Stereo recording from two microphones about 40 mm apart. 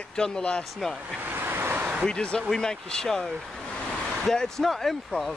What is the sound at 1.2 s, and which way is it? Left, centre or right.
Vehicle, right.